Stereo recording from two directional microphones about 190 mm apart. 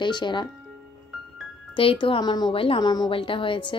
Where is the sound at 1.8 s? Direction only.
30° left (ahead or behind).